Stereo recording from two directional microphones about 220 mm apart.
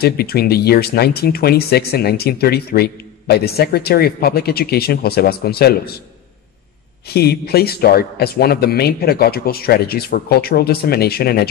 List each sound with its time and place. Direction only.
0.0 s speech: 45° left (ahead or behind)
7.1 s speech: 45° left (ahead or behind)